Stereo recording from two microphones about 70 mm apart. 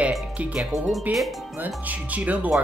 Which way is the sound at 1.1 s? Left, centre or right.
Right.